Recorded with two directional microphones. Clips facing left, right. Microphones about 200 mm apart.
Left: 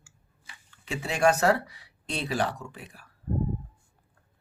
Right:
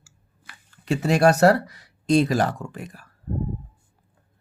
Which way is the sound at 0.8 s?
40° right (ahead or behind).